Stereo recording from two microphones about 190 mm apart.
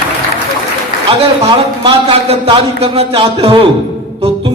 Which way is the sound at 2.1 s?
30° right (ahead or behind).